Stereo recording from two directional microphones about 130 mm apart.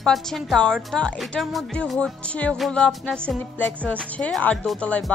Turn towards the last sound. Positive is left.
turn(degrees=5)  # may be behind; listen again after turning